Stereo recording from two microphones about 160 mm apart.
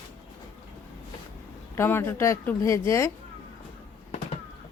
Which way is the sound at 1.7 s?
15° left (ahead or behind).